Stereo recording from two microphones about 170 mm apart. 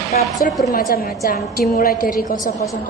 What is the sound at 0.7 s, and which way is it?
A woman's voice, 65° left (ahead or behind).